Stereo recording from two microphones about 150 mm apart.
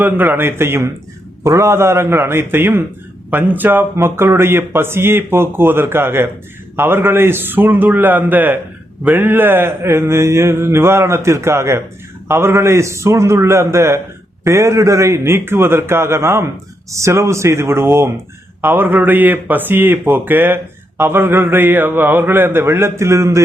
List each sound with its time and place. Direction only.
0.0 s mantra: 15° right (ahead or behind)
12.3 s a man's voice: 15° right (ahead or behind)
14.4 s mantra: 20° right (ahead or behind)
16.9 s a man's voice: 20° right (ahead or behind)
18.6 s mantra: 15° right (ahead or behind)